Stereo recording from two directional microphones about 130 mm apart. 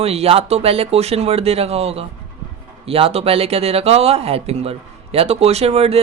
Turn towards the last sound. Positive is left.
turn(degrees=-50)  # may be behind; listen again after turning